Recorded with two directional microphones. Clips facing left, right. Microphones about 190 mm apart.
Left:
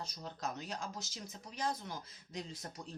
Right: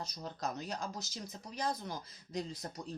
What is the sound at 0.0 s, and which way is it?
Speech, 40° right (ahead or behind).